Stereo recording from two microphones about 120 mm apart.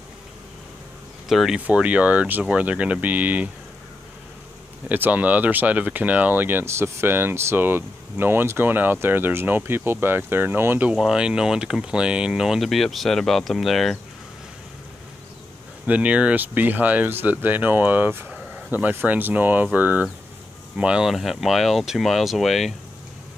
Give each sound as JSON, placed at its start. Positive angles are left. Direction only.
{"t": 1.3, "sound": "speech", "side_deg": -5}
{"t": 4.8, "sound": "speech", "side_deg": -15}
{"t": 15.9, "sound": "speech", "side_deg": -10}